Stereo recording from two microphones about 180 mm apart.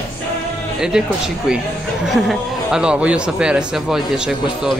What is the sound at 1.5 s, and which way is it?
Speech, 5° right (ahead or behind).